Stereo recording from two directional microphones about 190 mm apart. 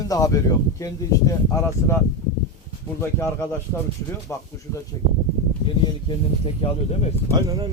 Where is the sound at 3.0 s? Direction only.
15° left (ahead or behind).